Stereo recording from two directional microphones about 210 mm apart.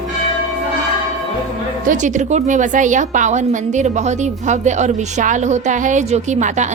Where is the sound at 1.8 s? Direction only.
35° right (ahead or behind).